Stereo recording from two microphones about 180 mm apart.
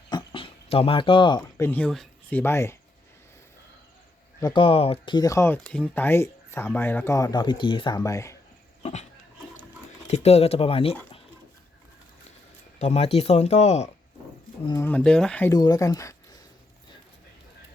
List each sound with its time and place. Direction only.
0.1 s a sound: 25° left (ahead or behind)
1.5 s speech: 10° left (ahead or behind)
4.4 s speech: 25° left (ahead or behind)
5.5 s speech: 5° left (ahead or behind)
8.8 s pig: 40° left (ahead or behind)
10.1 s speech: 35° left (ahead or behind)
12.8 s speech: 35° left (ahead or behind)
14.7 s speech: 15° left (ahead or behind)
15.5 s speech: 20° left (ahead or behind)